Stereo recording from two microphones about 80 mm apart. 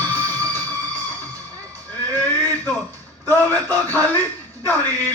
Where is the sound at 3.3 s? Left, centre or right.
Left.